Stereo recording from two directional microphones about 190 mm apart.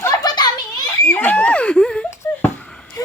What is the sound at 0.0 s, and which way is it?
Children playing, 20° left (ahead or behind).